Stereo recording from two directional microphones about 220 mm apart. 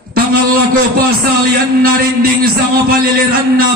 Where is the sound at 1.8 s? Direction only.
40° right (ahead or behind).